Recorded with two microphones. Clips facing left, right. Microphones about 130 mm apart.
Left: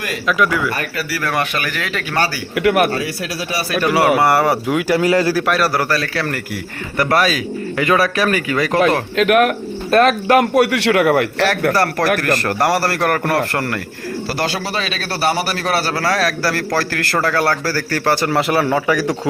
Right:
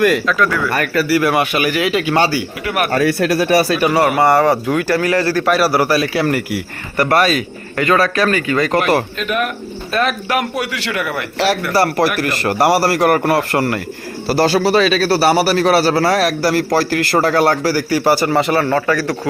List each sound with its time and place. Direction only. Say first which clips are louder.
0.3 s speech: even; 10° left (ahead or behind)
0.7 s speech: right 6 dB; 60° right (ahead or behind)
1.2 s a man's voice: right 5 dB; 10° right (ahead or behind)
2.9 s speech: right 8 dB; 60° right (ahead or behind)
3.9 s speech: even; 5° left (ahead or behind)
5.3 s a man's voice: right 2 dB; centre (ahead or behind)
7.0 s speech: right 2 dB; centre (ahead or behind)
9.1 s speech: left 7 dB; 85° left
9.9 s a man's voice: left 6 dB; 40° left (ahead or behind)
10.7 s a man's voice: left 8 dB; 70° left (ahead or behind)
11.7 s a man's voice: right 1 dB; 10° right (ahead or behind)
14.3 s speech: right 10 dB; 35° right (ahead or behind); by 19.3 s 15° left (ahead or behind)